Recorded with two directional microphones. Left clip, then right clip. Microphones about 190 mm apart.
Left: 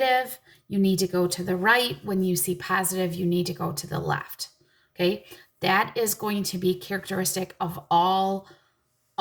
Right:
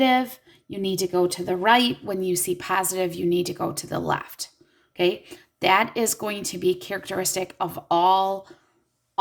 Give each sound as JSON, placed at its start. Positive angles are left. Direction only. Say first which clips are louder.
{"t": 0.0, "sound": "a woman's voice", "louder": "right 2 dB", "side_deg": -30}